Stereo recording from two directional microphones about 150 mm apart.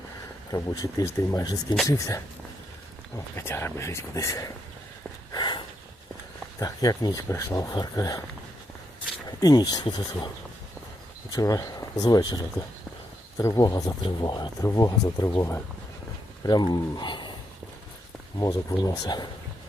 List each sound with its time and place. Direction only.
0.5 s speech: 25° left (ahead or behind)
3.3 s speech: 15° left (ahead or behind)
5.3 s a sound: 30° left (ahead or behind)
6.6 s speech: 25° left (ahead or behind)
9.4 s speech: 25° left (ahead or behind)
11.3 s speech: 25° left (ahead or behind)
18.3 s speech: 25° left (ahead or behind)